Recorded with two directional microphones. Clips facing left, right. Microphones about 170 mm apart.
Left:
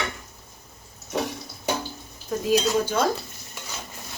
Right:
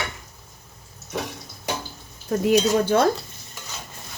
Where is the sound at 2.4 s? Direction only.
60° right (ahead or behind).